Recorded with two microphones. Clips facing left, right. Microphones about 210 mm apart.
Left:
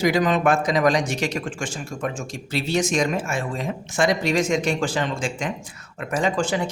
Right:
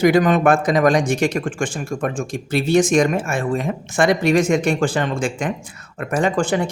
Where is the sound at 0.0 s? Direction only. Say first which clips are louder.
Right 5 dB; 55° right (ahead or behind).